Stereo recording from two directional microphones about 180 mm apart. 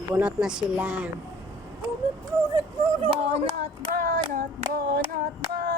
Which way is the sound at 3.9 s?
50° right (ahead or behind).